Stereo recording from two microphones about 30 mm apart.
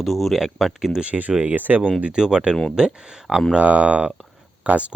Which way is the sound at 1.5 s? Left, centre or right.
Right.